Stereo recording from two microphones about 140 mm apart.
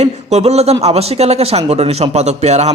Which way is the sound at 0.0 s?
50° right (ahead or behind).